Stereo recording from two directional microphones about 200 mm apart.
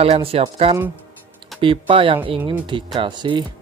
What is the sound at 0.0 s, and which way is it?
Speech, 30° right (ahead or behind).